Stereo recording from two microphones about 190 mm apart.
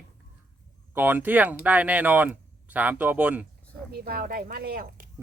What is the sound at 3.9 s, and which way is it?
Speech, 55° right (ahead or behind).